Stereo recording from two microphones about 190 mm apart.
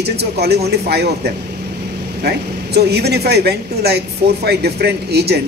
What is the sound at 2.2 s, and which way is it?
A man's voice, 60° right (ahead or behind).